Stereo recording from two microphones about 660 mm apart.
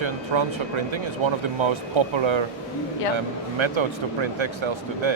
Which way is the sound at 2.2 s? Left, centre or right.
Right.